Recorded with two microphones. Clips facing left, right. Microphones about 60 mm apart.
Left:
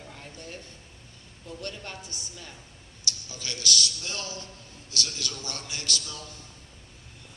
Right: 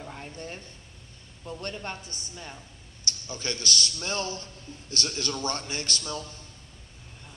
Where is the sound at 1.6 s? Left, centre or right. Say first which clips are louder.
Right 2 dB; right.